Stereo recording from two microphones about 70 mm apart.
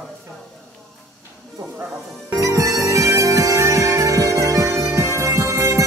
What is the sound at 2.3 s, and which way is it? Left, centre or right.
Music, right.